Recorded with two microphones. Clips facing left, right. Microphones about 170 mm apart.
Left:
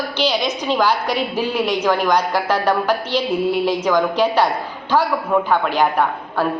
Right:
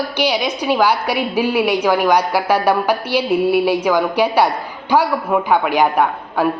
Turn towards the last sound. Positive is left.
turn(degrees=-10)  # may be behind; listen again after turning